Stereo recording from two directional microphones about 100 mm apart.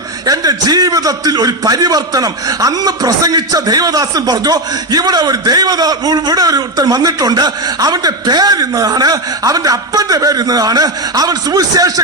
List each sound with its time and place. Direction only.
0.3 s a man's voice: 40° right (ahead or behind)